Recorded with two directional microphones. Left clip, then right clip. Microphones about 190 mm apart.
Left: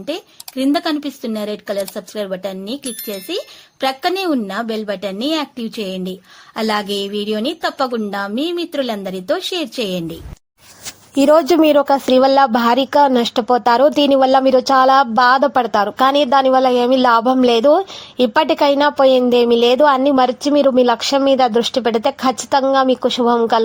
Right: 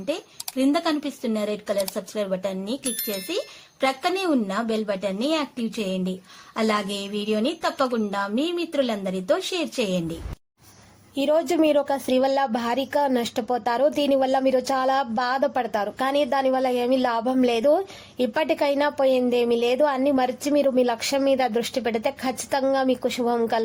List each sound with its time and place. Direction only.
0.0 s speech: 25° left (ahead or behind)
11.1 s speech: 40° left (ahead or behind)
11.3 s speech: 25° left (ahead or behind)